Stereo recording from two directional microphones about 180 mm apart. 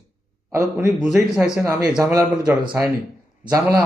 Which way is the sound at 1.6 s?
15° right (ahead or behind).